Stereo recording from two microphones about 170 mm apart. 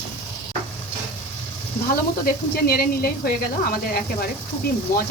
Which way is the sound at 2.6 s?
60° left (ahead or behind).